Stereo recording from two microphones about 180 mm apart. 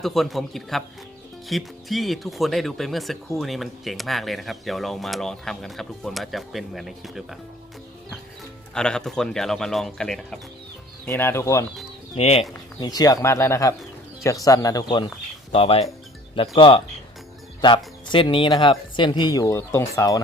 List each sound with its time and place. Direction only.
0.0 s speech: centre (ahead or behind)
8.7 s speech: 5° left (ahead or behind)
12.1 s speech: 35° left (ahead or behind)
12.9 s speech: 20° left (ahead or behind)